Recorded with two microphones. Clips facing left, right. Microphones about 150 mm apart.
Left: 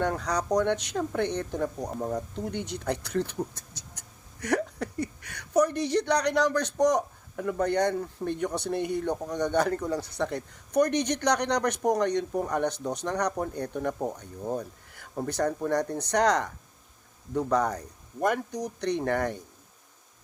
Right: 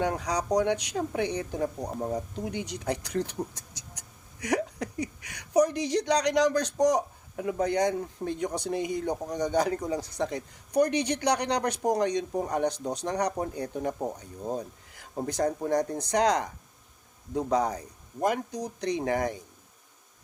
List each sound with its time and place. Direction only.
0.0 s speech: 15° right (ahead or behind)